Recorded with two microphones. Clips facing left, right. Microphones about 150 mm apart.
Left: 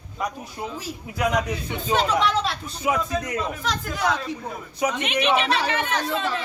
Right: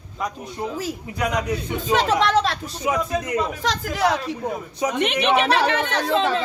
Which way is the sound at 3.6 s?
85° right.